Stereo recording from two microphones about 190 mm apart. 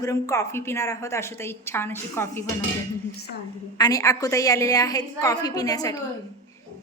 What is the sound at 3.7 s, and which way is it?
A woman's voice, 20° left (ahead or behind).